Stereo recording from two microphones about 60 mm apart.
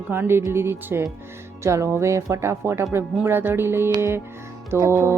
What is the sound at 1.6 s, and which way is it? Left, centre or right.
Speech, right.